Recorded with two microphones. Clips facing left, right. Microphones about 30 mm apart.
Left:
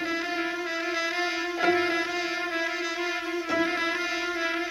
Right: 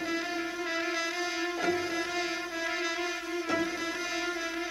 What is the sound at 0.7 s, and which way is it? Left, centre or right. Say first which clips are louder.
Music: left 3 dB; centre.